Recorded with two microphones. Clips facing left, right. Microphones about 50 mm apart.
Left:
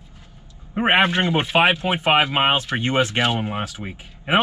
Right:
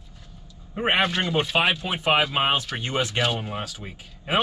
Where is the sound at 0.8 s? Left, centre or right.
Left.